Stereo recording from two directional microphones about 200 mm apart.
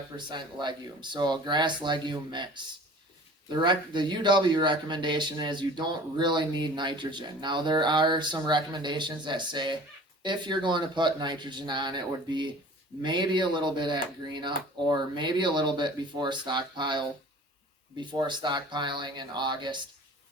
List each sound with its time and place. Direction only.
0.3 s speech: 20° right (ahead or behind)